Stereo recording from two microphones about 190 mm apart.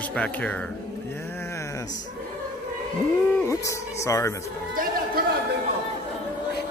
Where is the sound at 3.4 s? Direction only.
15° left (ahead or behind).